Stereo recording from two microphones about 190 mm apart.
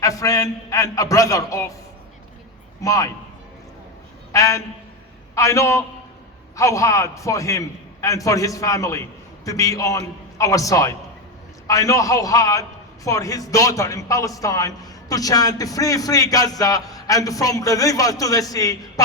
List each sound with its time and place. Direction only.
0.0 s a man's voice: 20° left (ahead or behind)
2.8 s a man's voice: 20° left (ahead or behind)
4.3 s a man's voice: 15° left (ahead or behind)